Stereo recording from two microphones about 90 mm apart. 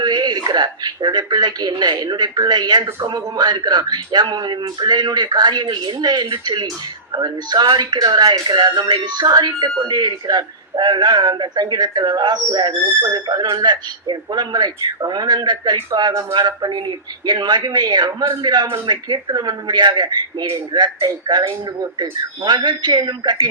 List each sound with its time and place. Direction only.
0.0 s speech: 50° right (ahead or behind)
22.4 s speech: 55° right (ahead or behind)